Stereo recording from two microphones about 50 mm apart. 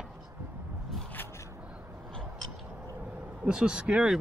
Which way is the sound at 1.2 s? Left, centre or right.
Left.